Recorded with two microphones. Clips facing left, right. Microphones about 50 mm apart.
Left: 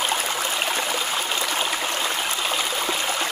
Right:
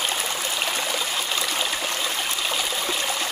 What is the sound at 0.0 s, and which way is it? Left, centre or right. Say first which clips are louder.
Stream: left 2 dB; left.